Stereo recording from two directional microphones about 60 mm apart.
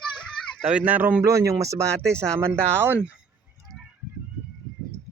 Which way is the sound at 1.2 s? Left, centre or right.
Right.